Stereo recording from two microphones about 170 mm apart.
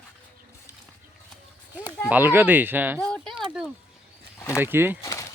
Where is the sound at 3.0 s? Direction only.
5° left (ahead or behind).